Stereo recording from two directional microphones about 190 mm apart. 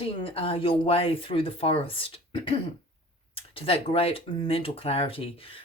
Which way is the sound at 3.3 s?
30° left (ahead or behind).